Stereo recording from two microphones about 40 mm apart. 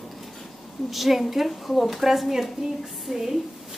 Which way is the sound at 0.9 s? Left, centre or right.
Centre.